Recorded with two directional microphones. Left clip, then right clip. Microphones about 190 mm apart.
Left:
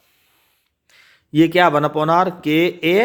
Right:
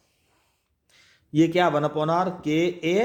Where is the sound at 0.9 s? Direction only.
25° left (ahead or behind).